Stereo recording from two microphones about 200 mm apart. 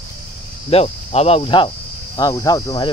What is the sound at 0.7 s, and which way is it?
Speech, 30° left (ahead or behind).